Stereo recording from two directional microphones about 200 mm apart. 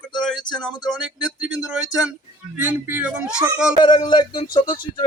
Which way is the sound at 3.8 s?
25° left (ahead or behind).